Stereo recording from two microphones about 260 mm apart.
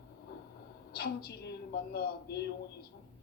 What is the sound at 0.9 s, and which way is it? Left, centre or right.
A woman's voice, left.